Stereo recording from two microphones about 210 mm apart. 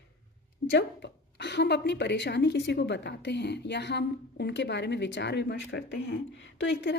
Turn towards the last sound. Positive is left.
turn(degrees=55)  # may be behind; listen again after turning